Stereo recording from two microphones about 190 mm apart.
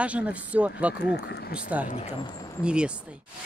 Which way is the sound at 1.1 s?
60° left (ahead or behind).